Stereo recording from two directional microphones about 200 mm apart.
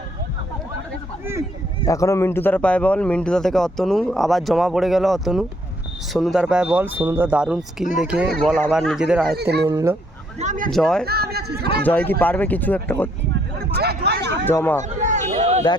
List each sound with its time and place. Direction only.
1.2 s a sound: 10° right (ahead or behind)
1.8 s speech: 15° left (ahead or behind); by 9.3 s 5° right (ahead or behind)
9.3 s speech: 55° right (ahead or behind)
9.6 s speech: 15° right (ahead or behind)
10.3 s speech: 35° right (ahead or behind)
10.7 s speech: centre (ahead or behind)
11.0 s speech: 50° right (ahead or behind)
11.8 s speech: 10° left (ahead or behind)
13.3 s a sound: 50° right (ahead or behind)
14.4 s speech: 10° left (ahead or behind)
14.8 s a sound: 35° right (ahead or behind)